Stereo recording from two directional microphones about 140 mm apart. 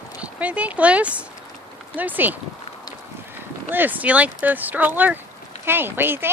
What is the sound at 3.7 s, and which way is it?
Speech, 15° right (ahead or behind).